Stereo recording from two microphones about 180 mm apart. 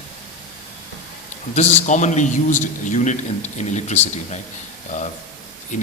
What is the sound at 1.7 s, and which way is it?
A man's voice, 40° left (ahead or behind).